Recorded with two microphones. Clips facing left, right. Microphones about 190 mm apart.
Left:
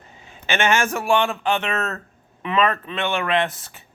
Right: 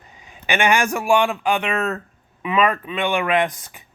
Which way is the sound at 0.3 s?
15° right (ahead or behind).